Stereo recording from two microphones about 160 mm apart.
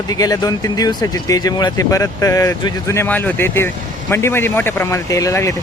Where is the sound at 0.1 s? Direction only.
25° left (ahead or behind).